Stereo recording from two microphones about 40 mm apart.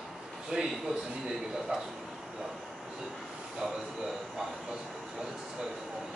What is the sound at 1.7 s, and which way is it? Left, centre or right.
Speech, centre.